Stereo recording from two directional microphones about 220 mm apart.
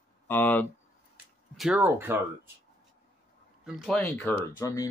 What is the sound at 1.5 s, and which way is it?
Speech, 5° right (ahead or behind).